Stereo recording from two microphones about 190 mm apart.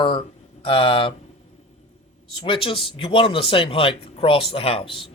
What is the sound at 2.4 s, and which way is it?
Speech, 25° left (ahead or behind).